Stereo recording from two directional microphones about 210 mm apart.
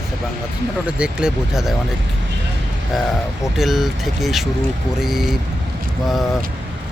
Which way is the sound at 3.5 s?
Centre (ahead or behind).